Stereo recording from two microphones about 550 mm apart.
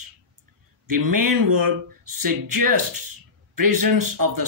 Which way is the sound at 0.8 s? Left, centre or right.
Right.